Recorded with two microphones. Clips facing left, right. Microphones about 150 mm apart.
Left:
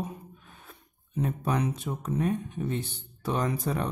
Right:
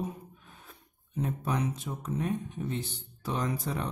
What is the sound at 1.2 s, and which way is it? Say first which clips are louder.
Speech: left 3 dB; 60° left (ahead or behind).